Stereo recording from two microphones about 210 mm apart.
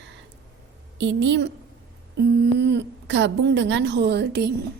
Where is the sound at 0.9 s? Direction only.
60° right (ahead or behind).